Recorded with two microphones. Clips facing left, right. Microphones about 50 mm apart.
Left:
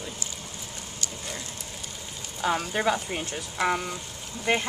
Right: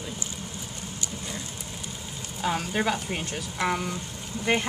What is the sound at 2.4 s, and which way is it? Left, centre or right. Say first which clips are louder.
Speech: left 1 dB; centre.